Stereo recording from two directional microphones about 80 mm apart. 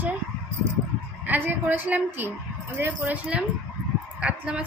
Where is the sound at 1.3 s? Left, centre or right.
Right.